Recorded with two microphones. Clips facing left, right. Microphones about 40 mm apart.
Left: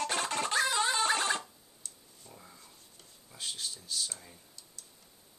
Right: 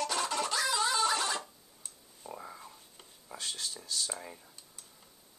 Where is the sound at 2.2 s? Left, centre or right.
Right.